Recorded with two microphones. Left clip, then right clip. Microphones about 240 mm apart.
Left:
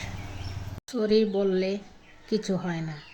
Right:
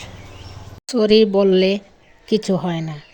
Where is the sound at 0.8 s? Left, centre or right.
Right.